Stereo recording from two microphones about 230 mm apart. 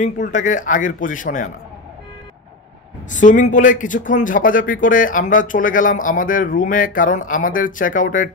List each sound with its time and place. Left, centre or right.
0.0 s speech: left
3.1 s speech: left